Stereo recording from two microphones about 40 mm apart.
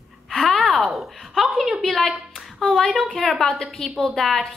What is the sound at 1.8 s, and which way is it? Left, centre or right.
A woman's voice, centre.